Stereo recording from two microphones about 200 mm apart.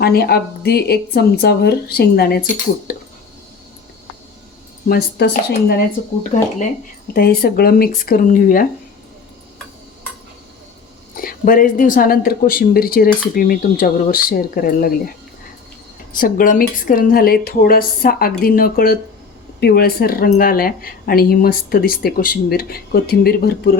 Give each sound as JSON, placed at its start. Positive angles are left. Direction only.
{"t": 0.0, "sound": "speech", "side_deg": 50}
{"t": 2.9, "sound": "a sound", "side_deg": 50}
{"t": 4.9, "sound": "speech", "side_deg": 55}
{"t": 6.3, "sound": "speech", "side_deg": 40}
{"t": 7.1, "sound": "speech", "side_deg": 50}
{"t": 11.2, "sound": "speech", "side_deg": 45}
{"t": 16.1, "sound": "speech", "side_deg": 45}